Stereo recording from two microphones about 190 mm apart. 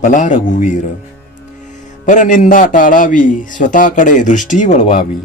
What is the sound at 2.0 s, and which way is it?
A man's voice, 40° left (ahead or behind).